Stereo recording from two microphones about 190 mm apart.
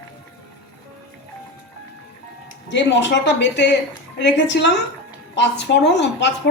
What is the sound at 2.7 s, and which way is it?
Speech, 70° left (ahead or behind).